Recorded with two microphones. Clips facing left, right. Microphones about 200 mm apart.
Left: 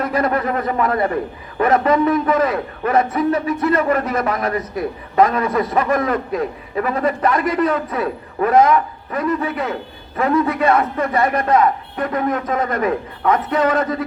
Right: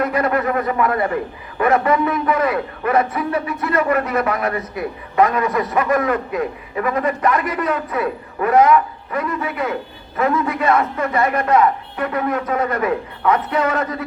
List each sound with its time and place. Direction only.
0.0 s a man's voice: 30° left (ahead or behind)